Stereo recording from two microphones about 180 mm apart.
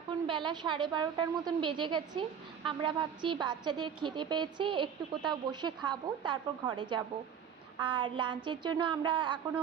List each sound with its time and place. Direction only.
0.3 s a woman's voice: 25° right (ahead or behind)